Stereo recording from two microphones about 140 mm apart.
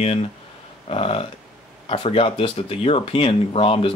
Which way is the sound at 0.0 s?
45° left (ahead or behind).